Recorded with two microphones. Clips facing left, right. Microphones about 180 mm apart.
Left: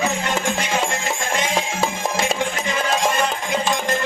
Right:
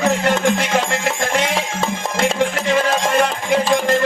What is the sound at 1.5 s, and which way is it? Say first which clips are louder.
Music: right 1 dB; 5° left (ahead or behind).